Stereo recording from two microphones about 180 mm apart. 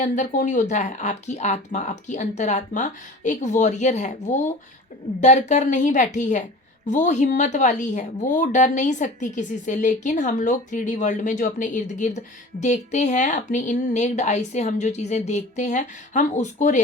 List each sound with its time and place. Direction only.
0.0 s speech: 45° left (ahead or behind)